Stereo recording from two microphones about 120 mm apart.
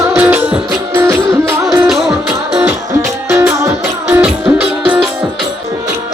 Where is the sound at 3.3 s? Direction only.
25° right (ahead or behind).